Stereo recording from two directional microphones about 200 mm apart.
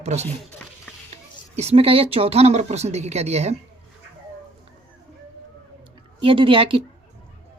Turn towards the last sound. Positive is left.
turn(degrees=-25)  # may be behind; listen again after turning